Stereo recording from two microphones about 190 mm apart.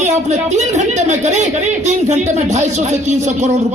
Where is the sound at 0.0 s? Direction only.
35° right (ahead or behind).